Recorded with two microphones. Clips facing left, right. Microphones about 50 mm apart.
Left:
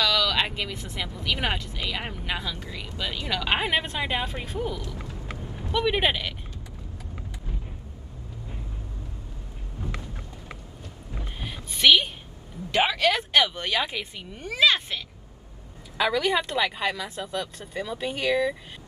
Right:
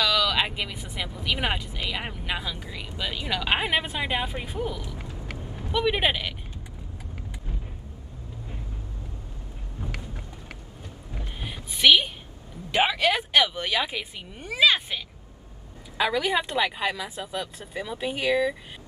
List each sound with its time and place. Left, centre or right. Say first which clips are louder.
0.0 s speech: even; centre
4.8 s a sound: left 1 dB; centre
5.7 s speech: even; centre
11.3 s a sound: even; centre
12.7 s speech: even; centre
16.0 s speech: left 1 dB; centre